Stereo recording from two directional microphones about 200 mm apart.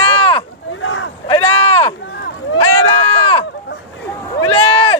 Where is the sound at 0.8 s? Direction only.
80° left.